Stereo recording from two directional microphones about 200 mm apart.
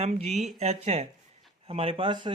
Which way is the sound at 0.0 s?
30° right (ahead or behind).